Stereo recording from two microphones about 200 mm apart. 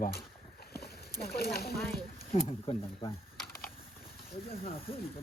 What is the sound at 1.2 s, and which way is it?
Speech, 50° left (ahead or behind).